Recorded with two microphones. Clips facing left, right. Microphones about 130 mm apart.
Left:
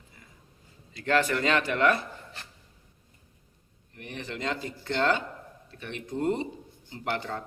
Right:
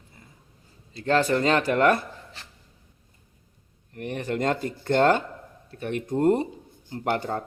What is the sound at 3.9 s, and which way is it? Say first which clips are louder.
Speech: right 9 dB; 55° right (ahead or behind).